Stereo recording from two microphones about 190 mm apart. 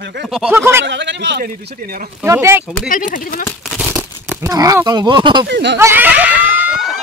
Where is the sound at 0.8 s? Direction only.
70° right (ahead or behind).